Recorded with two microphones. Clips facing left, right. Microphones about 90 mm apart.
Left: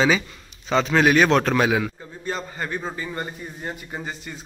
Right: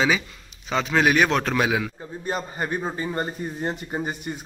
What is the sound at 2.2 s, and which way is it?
A man's voice, 20° right (ahead or behind).